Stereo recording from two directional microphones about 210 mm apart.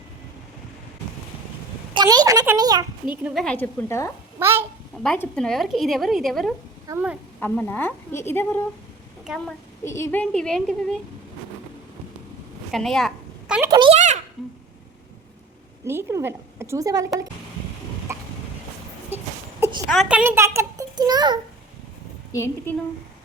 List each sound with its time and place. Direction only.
1.9 s a sound: 20° right (ahead or behind)
3.2 s a woman's voice: centre (ahead or behind)
4.4 s a child's voice: 10° right (ahead or behind)
5.0 s a woman's voice: 5° left (ahead or behind); by 7.2 s 10° right (ahead or behind)
7.3 s a woman's voice: 10° left (ahead or behind)
9.2 s a woman's voice: centre (ahead or behind)
9.8 s a woman's voice: 10° left (ahead or behind)
12.7 s a sound: centre (ahead or behind)
13.6 s speech: 20° right (ahead or behind)
15.8 s a child's voice: 10° right (ahead or behind)
18.1 s a sound: 10° right (ahead or behind)
19.9 s a child's voice: 5° right (ahead or behind); by 21.3 s 20° right (ahead or behind)
22.3 s a woman's voice: 10° left (ahead or behind)